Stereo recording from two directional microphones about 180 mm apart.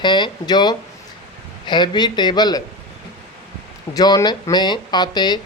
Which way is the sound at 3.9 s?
20° left (ahead or behind).